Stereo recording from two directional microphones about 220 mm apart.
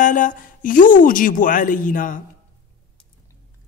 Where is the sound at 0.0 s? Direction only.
35° left (ahead or behind).